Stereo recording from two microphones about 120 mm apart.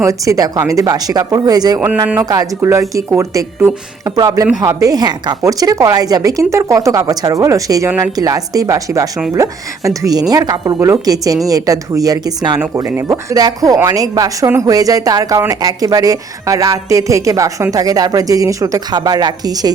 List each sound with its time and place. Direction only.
0.0 s speech: 25° right (ahead or behind)